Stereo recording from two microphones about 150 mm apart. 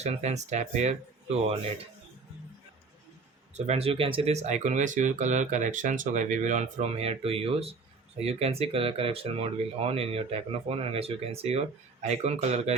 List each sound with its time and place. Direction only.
0.0 s speech: 45° right (ahead or behind)
3.5 s speech: 45° right (ahead or behind)